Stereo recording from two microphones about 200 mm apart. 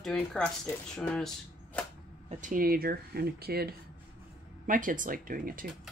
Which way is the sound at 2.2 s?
40° right (ahead or behind).